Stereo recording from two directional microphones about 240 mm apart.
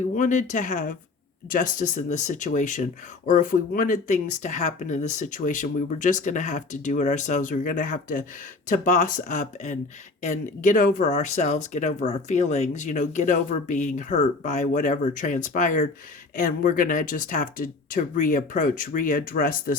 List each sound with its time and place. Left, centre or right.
0.0 s speech: left